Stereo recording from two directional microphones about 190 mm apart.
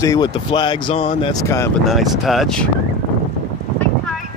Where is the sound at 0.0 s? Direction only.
20° left (ahead or behind).